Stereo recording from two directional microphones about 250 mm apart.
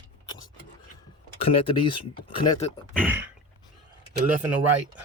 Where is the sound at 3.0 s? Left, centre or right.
Centre.